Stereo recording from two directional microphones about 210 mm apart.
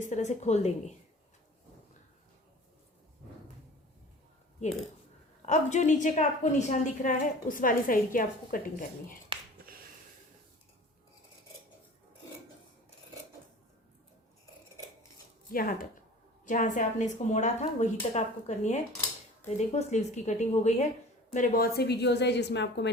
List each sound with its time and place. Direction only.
0.0 s a woman's voice: 35° left (ahead or behind)
5.5 s a woman's voice: 35° left (ahead or behind)
15.5 s a woman's voice: 45° left (ahead or behind)